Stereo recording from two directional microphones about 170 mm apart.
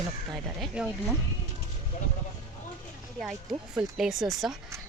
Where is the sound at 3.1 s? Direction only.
Centre (ahead or behind).